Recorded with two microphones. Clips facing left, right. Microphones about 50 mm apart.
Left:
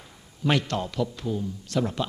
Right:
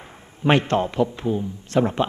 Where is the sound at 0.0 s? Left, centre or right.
Right.